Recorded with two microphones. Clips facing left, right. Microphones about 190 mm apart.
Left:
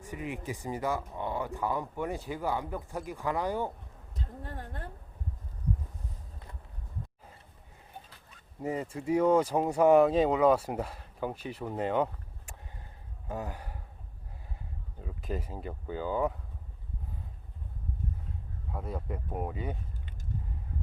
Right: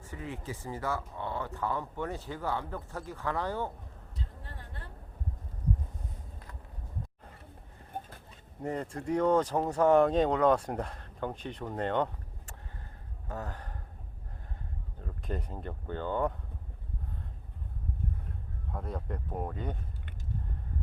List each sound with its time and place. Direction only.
0.0 s speech: 15° left (ahead or behind)
4.2 s speech: 45° left (ahead or behind)
7.9 s boat: 50° right (ahead or behind)
8.6 s speech: 5° left (ahead or behind)
15.0 s speech: 5° left (ahead or behind)
18.7 s speech: 5° left (ahead or behind)